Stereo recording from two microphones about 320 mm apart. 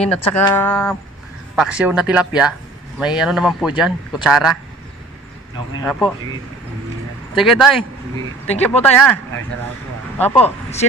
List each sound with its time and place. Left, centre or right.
0.1 s a man's voice: centre
5.9 s a man's voice: centre
7.3 s a man's voice: centre
10.4 s speech: centre